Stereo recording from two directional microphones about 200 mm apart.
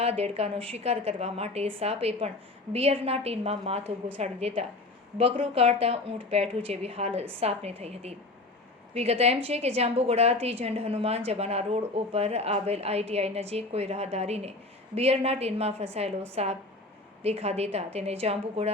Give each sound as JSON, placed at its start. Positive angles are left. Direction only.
{"t": 0.0, "sound": "a woman's voice", "side_deg": -30}